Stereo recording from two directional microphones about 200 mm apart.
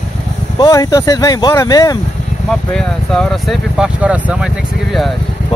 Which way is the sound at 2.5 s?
5° left (ahead or behind).